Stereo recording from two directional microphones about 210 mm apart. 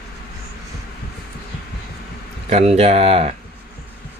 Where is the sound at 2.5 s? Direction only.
30° right (ahead or behind).